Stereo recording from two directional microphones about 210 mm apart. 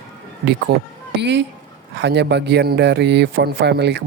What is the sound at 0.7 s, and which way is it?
Speech, 50° right (ahead or behind).